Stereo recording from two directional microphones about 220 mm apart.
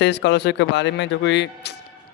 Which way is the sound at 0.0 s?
50° left (ahead or behind).